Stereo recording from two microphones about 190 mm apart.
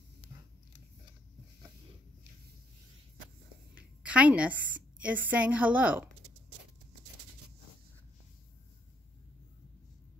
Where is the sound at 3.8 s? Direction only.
5° right (ahead or behind).